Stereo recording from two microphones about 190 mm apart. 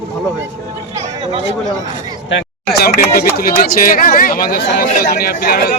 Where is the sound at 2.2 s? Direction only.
65° left (ahead or behind).